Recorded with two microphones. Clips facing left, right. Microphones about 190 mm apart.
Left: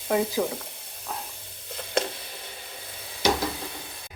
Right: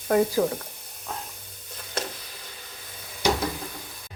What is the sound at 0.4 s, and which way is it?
Speech, 5° left (ahead or behind).